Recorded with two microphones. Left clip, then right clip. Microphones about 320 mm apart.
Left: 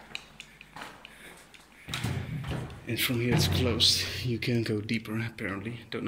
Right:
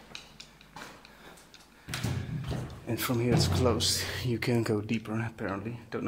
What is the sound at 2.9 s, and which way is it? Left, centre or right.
Speech, right.